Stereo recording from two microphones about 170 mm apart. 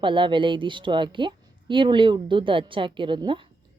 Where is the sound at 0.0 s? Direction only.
30° right (ahead or behind).